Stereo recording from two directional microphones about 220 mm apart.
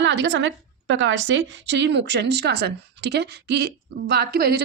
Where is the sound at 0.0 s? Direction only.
55° right (ahead or behind).